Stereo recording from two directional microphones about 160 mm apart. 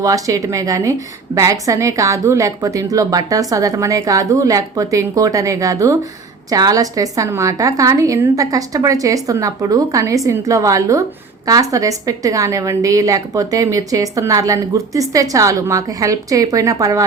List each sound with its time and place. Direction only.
0.0 s a woman's voice: 20° right (ahead or behind)